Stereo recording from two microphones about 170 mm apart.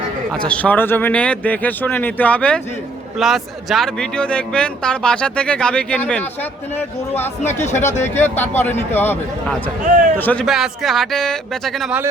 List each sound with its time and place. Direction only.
0.3 s a man's voice: 5° left (ahead or behind)
7.4 s speech: 45° left (ahead or behind)
8.2 s speech: 10° left (ahead or behind)
9.8 s a man's voice: 50° right (ahead or behind)
10.2 s speech: 10° left (ahead or behind)
10.4 s a man's voice: centre (ahead or behind)